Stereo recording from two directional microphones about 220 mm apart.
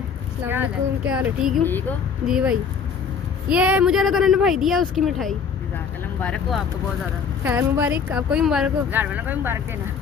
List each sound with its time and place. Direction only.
0.4 s a woman's voice: 10° right (ahead or behind)
7.4 s speech: 10° right (ahead or behind)